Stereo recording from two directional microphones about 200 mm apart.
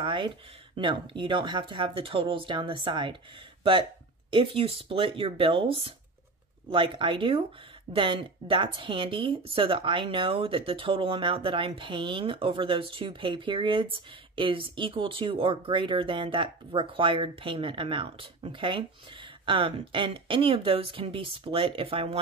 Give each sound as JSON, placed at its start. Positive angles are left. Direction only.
{"t": 0.0, "sound": "speech", "side_deg": -25}
{"t": 4.3, "sound": "speech", "side_deg": -25}